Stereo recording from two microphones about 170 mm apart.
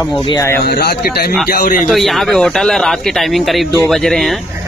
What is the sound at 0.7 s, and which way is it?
Speech, 70° left (ahead or behind).